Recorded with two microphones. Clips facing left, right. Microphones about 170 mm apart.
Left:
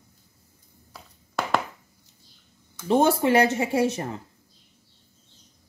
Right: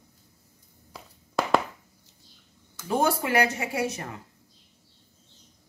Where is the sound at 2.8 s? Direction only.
25° left (ahead or behind).